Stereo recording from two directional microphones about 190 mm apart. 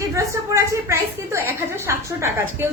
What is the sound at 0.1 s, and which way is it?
A woman's voice, 15° right (ahead or behind).